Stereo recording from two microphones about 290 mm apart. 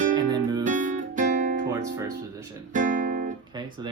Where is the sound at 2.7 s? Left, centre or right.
Right.